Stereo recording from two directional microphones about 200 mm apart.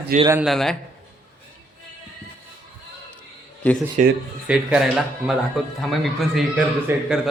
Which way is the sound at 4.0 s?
40° right (ahead or behind).